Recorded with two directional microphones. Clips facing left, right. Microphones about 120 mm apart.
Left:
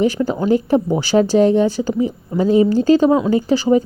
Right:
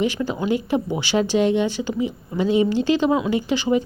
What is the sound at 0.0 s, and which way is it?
Speech, 40° left (ahead or behind).